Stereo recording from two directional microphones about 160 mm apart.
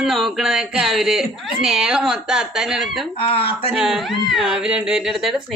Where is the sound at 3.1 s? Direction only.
35° left (ahead or behind).